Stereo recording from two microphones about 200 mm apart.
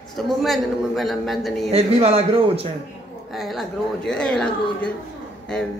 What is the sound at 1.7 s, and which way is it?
Speech, 30° right (ahead or behind).